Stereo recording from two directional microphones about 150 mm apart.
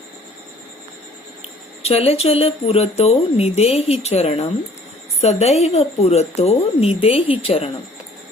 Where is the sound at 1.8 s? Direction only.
40° left (ahead or behind).